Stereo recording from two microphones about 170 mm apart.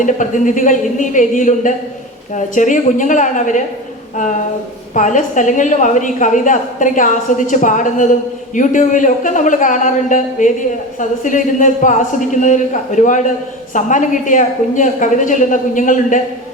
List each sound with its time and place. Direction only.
0.0 s a woman's voice: 50° left (ahead or behind)